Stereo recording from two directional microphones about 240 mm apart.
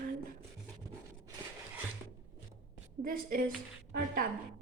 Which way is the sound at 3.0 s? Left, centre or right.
Right.